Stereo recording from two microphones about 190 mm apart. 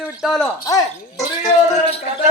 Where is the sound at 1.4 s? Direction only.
35° left (ahead or behind).